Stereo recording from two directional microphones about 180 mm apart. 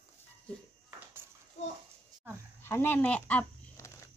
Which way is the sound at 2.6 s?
10° left (ahead or behind).